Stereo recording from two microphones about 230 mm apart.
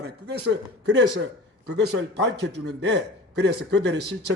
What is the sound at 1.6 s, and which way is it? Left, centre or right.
A man's voice, right.